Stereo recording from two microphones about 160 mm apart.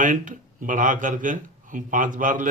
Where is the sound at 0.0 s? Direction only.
55° right (ahead or behind).